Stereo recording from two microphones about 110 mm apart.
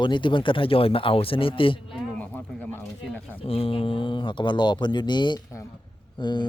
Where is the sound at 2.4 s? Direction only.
15° left (ahead or behind).